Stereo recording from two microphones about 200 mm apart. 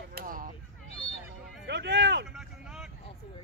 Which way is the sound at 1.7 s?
60° right (ahead or behind).